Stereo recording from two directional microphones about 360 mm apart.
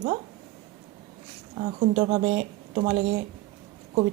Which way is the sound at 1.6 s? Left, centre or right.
Centre.